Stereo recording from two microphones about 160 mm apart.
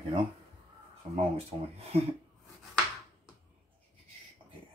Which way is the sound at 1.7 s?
40° right (ahead or behind).